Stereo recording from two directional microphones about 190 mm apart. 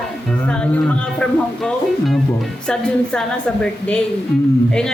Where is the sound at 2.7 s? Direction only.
5° left (ahead or behind).